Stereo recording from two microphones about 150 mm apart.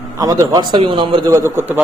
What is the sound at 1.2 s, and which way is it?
Speech, 20° right (ahead or behind).